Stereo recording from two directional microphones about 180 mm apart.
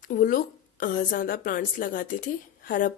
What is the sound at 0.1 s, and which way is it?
Speech, 50° left (ahead or behind).